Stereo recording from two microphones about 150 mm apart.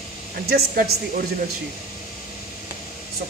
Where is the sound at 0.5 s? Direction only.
75° right (ahead or behind).